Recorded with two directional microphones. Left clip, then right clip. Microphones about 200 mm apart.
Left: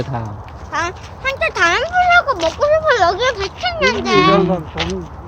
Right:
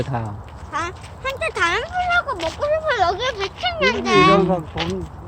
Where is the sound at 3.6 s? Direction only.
Centre (ahead or behind).